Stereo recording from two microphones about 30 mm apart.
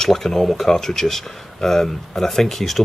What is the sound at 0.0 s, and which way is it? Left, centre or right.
Speech, centre.